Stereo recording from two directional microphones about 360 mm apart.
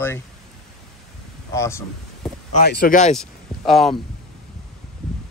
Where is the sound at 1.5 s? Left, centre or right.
Centre.